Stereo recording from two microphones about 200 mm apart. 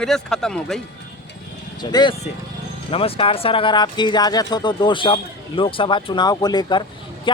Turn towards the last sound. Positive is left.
turn(degrees=25)  # may be behind; listen again after turning